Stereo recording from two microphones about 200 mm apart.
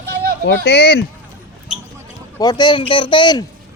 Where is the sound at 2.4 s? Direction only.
20° left (ahead or behind).